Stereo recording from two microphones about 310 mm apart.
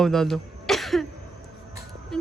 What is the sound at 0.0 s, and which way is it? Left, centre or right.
Cough, centre.